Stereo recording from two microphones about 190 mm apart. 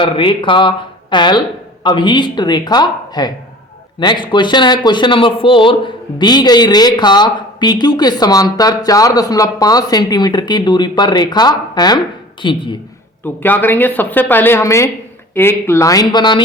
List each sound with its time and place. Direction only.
0.0 s speech: 25° left (ahead or behind)
13.2 s speech: 10° left (ahead or behind)